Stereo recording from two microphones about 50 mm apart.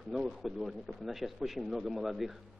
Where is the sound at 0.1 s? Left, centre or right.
Centre.